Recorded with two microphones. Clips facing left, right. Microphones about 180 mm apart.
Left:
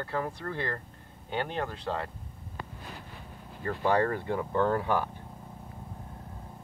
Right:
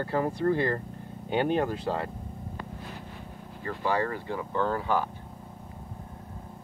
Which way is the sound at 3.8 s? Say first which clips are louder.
Left 2 dB; 55° left (ahead or behind).